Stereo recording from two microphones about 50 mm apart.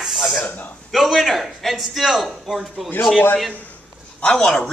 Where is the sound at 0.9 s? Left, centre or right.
Centre.